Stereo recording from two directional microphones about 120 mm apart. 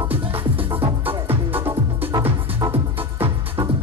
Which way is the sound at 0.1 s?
50° right (ahead or behind).